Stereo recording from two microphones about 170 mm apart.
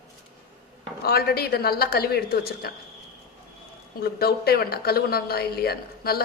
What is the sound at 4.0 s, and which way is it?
A woman's voice, 65° left (ahead or behind).